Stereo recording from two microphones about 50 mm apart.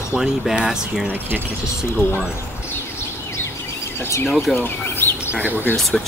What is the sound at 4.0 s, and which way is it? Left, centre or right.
Speech, left.